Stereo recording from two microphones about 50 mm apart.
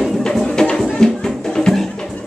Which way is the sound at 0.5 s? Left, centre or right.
Centre.